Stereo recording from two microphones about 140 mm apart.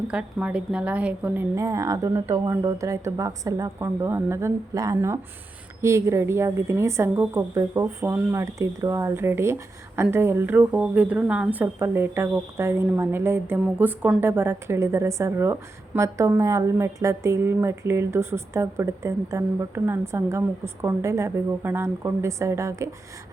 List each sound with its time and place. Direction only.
0.1 s speech: 10° right (ahead or behind)
1.5 s a woman's voice: 25° right (ahead or behind)